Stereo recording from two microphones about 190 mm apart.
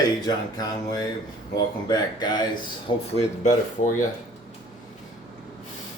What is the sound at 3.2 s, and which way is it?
Speech, 40° left (ahead or behind).